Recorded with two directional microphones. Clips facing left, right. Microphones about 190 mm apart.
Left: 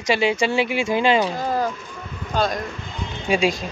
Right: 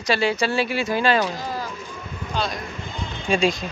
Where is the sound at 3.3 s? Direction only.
10° left (ahead or behind).